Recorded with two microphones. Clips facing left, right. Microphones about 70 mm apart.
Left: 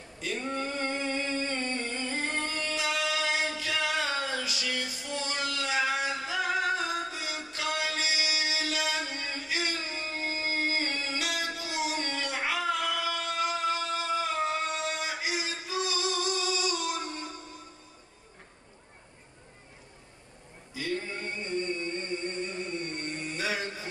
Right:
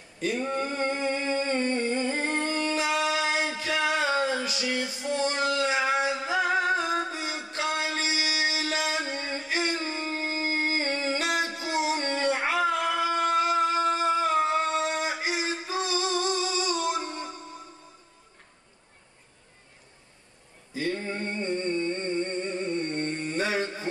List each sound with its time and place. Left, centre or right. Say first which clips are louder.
0.3 s singing: right 3 dB; right
20.7 s singing: right 4 dB; right